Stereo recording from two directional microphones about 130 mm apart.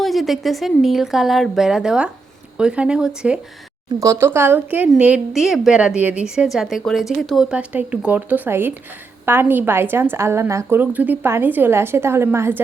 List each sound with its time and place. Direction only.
0.0 s a woman's voice: centre (ahead or behind)
4.0 s a woman's voice: 20° right (ahead or behind)